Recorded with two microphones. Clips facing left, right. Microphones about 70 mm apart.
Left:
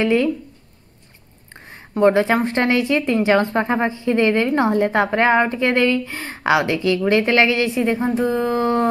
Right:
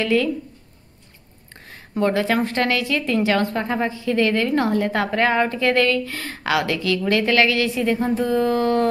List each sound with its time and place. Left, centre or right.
0.0 s a woman's voice: left
1.5 s a sound: left
2.4 s a woman's voice: left